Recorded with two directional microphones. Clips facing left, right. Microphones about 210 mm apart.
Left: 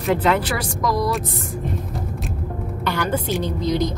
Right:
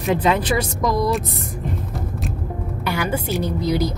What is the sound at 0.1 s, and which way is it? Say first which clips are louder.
Speech: right 1 dB; 15° right (ahead or behind).